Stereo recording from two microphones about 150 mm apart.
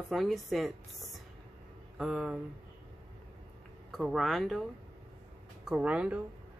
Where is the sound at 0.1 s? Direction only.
Centre (ahead or behind).